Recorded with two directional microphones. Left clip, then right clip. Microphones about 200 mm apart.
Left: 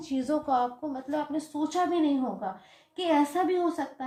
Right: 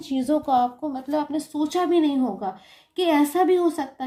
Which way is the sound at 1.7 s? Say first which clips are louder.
Right 5 dB; 45° right (ahead or behind).